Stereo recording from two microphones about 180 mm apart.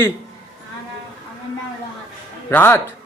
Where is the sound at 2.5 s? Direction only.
15° left (ahead or behind).